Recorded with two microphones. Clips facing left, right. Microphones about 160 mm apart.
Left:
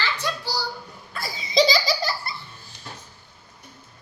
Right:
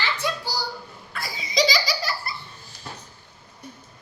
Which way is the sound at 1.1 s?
30° left (ahead or behind).